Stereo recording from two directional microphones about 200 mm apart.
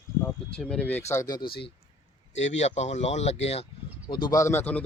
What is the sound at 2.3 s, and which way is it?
Speech, 35° left (ahead or behind).